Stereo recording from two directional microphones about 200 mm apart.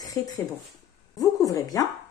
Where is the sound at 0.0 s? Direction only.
15° left (ahead or behind).